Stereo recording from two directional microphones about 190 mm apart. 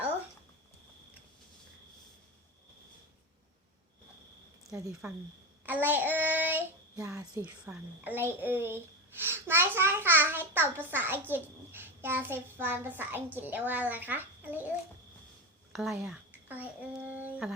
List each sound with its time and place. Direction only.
5.0 s a child's voice: 10° right (ahead or behind)
5.6 s child singing: 10° right (ahead or behind)
7.2 s a child's voice: 15° right (ahead or behind)
15.7 s speech: centre (ahead or behind)
16.0 s a sound: 10° right (ahead or behind)